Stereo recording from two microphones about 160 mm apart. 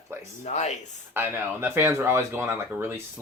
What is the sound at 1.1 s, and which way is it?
Speech, 15° right (ahead or behind).